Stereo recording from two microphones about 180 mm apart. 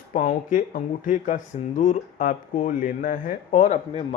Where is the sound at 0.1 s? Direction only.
45° left (ahead or behind).